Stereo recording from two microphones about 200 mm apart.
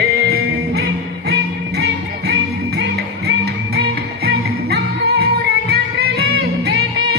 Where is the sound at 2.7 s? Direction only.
55° right (ahead or behind).